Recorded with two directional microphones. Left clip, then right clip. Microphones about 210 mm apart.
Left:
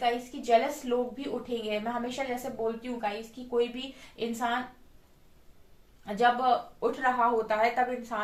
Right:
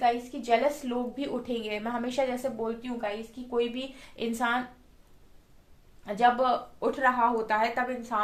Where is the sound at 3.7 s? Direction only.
55° right (ahead or behind).